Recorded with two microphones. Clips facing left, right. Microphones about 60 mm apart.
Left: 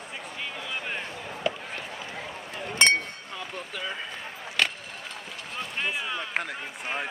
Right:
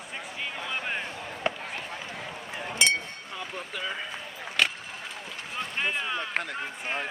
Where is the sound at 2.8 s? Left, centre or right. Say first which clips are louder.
Left 4 dB; left.